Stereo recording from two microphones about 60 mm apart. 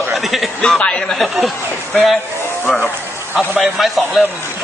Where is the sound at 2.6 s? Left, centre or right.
Centre.